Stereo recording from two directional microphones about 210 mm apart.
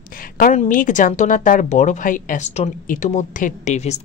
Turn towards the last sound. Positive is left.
turn(degrees=30)  # may be behind; listen again after turning